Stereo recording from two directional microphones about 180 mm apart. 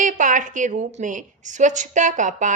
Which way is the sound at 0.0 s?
45° right (ahead or behind).